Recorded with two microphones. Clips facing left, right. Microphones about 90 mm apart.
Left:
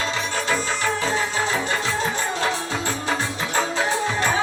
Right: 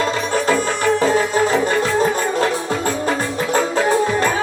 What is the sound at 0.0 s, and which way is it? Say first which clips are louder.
Music: right 7 dB; 50° right (ahead or behind).